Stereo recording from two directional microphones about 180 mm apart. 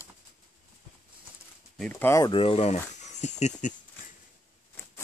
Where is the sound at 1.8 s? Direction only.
10° left (ahead or behind).